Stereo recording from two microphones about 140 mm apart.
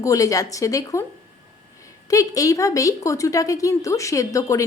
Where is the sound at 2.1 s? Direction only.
25° left (ahead or behind).